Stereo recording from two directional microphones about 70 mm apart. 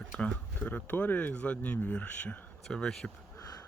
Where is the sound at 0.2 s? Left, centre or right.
Centre.